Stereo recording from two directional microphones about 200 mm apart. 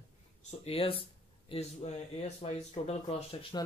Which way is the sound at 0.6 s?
30° left (ahead or behind).